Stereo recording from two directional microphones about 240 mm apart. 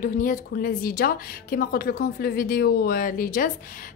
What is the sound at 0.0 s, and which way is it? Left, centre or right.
Speech, left.